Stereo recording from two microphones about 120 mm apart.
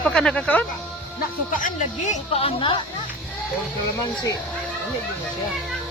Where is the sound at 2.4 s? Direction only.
45° left (ahead or behind).